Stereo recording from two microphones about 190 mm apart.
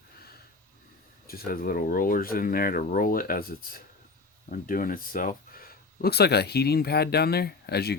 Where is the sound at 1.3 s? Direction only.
50° left (ahead or behind).